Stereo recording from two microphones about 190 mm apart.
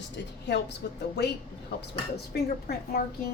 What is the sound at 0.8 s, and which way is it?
Speech, 60° left (ahead or behind).